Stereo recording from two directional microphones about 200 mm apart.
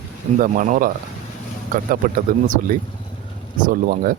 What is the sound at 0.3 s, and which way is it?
Speech, 40° right (ahead or behind).